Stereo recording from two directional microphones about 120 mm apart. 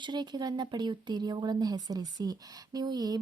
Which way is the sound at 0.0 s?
40° right (ahead or behind).